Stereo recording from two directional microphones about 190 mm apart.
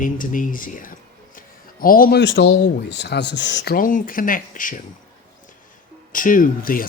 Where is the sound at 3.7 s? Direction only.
45° left (ahead or behind).